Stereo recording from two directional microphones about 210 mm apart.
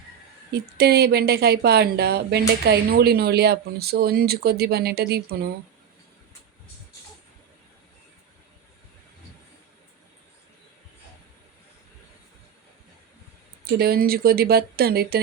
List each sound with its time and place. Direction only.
0.5 s speech: 50° right (ahead or behind)
13.7 s speech: 45° right (ahead or behind)